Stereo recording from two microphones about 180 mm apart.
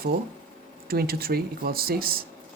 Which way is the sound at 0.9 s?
55° right (ahead or behind).